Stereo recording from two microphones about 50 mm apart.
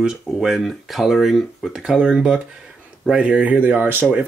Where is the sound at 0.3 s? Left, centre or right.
Centre.